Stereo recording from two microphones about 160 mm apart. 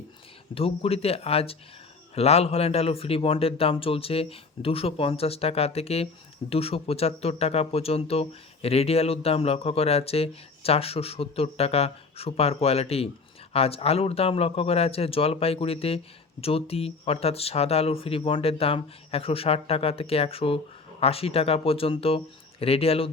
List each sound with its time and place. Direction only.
0.5 s speech: 35° left (ahead or behind)